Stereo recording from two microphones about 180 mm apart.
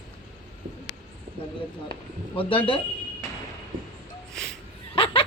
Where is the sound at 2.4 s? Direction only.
30° left (ahead or behind).